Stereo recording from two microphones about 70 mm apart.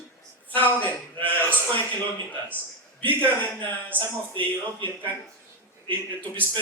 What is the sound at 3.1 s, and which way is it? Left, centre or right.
Speech, left.